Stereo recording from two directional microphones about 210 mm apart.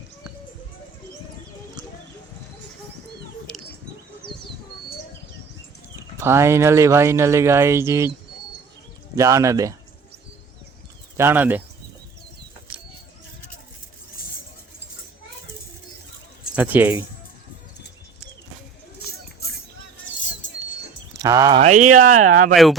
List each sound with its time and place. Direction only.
6.1 s speech: 10° right (ahead or behind)
9.1 s speech: 15° right (ahead or behind)
11.2 s speech: 10° right (ahead or behind)
16.6 s speech: 10° right (ahead or behind)
21.2 s speech: 15° right (ahead or behind)
21.8 s speech: 90° right
22.5 s speech: centre (ahead or behind)